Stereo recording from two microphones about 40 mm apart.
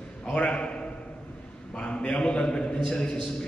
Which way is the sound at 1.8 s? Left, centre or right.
Left.